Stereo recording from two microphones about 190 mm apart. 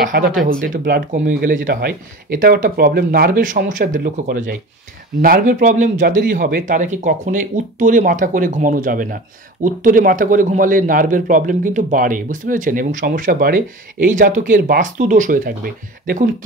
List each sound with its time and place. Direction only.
0.0 s speech: 45° right (ahead or behind)